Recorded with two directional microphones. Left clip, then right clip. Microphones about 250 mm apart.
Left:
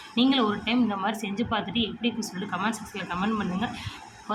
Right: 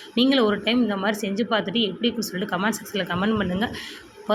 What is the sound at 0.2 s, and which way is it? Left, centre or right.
A woman's voice, centre.